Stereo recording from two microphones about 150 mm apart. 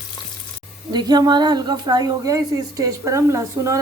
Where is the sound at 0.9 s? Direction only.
25° right (ahead or behind).